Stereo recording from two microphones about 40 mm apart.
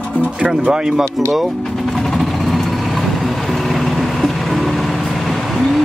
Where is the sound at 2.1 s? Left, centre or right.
Centre.